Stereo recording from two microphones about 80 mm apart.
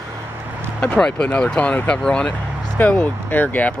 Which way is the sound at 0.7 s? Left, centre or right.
Centre.